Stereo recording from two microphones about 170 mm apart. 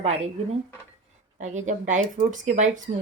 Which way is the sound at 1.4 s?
45° right (ahead or behind).